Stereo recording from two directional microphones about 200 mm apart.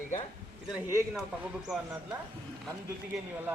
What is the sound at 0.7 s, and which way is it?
Speech, 15° right (ahead or behind).